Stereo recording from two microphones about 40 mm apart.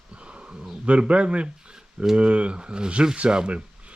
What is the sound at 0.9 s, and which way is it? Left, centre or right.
Speech, right.